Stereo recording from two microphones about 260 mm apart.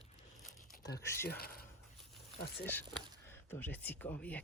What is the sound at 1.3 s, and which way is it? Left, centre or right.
Speech, left.